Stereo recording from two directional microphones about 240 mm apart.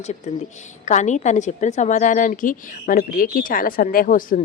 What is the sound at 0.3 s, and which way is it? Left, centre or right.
A woman's voice, left.